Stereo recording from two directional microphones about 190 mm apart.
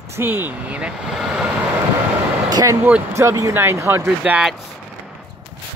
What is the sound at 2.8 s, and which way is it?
Speech, 10° right (ahead or behind).